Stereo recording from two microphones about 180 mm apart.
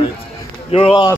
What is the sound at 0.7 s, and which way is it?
Speech, 35° left (ahead or behind).